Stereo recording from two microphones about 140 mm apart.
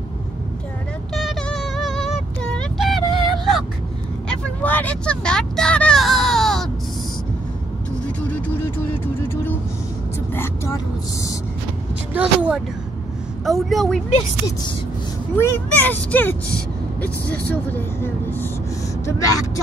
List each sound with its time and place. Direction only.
1.1 s a sound: centre (ahead or behind)
4.3 s vehicle: 10° left (ahead or behind)
8.0 s vehicle: 10° left (ahead or behind)
12.1 s speech: 10° right (ahead or behind)
15.3 s speech: 15° left (ahead or behind)